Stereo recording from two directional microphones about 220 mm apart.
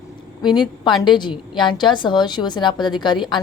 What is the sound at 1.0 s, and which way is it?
A woman's voice, 20° left (ahead or behind).